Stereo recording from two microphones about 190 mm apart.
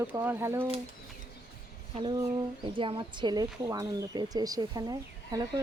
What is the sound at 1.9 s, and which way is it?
Speech, 25° right (ahead or behind).